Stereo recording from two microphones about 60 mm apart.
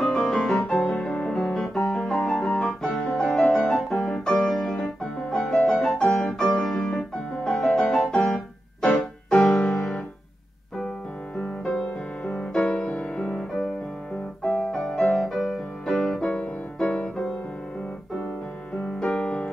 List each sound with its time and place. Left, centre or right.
0.0 s music: centre
2.4 s piano: centre
6.1 s music: centre
6.5 s piano: centre
9.3 s music: centre
11.3 s music: centre
13.3 s music: centre
18.9 s music: centre